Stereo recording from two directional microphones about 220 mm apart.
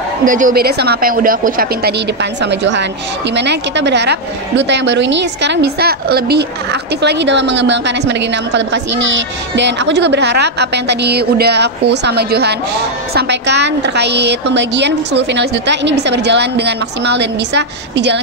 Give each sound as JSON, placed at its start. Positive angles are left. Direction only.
{"t": 0.2, "sound": "speech", "side_deg": -35}
{"t": 2.4, "sound": "a woman's voice", "side_deg": -50}